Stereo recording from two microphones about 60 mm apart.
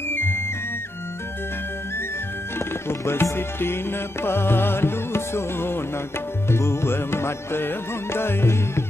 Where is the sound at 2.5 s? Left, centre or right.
Left.